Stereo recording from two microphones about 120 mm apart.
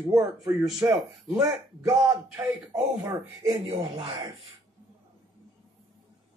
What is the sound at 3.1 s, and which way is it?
Speech, 40° right (ahead or behind).